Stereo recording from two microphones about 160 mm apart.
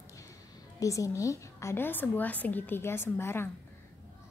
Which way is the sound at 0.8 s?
20° left (ahead or behind).